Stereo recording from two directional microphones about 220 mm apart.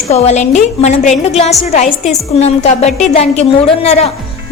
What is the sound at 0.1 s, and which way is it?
A woman's voice, 30° left (ahead or behind).